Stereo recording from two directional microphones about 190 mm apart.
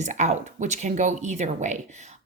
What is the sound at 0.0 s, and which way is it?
A woman's voice, 40° right (ahead or behind).